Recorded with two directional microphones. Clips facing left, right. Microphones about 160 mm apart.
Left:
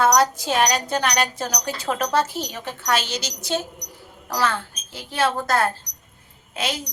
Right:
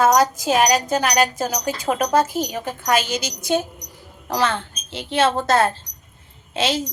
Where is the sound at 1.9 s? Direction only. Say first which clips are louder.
Right 3 dB; 15° right (ahead or behind).